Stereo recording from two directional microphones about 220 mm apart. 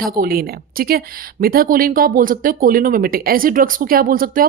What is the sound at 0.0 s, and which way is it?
A woman's voice, 40° right (ahead or behind).